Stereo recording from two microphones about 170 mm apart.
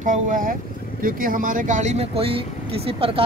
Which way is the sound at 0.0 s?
50° right (ahead or behind).